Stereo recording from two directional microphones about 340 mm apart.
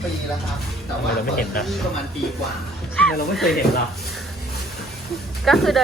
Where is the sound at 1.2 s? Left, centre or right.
Left.